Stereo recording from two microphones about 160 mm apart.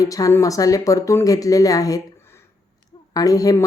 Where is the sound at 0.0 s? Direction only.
20° left (ahead or behind).